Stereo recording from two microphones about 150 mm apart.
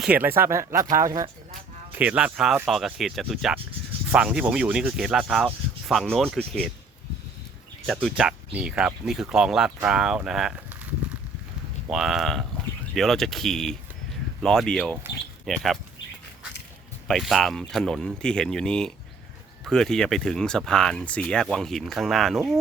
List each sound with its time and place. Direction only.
0.0 s speech: 10° right (ahead or behind)
1.9 s speech: 10° right (ahead or behind)
8.1 s speech: 5° right (ahead or behind)
17.1 s speech: centre (ahead or behind)